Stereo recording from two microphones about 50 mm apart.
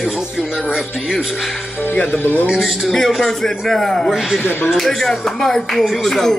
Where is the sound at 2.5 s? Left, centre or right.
Centre.